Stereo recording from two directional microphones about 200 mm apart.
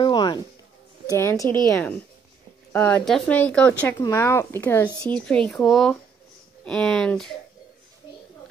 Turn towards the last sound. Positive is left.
turn(degrees=5)  # may be behind; listen again after turning